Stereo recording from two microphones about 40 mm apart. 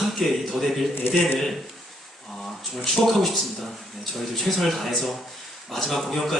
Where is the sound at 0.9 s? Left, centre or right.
Left.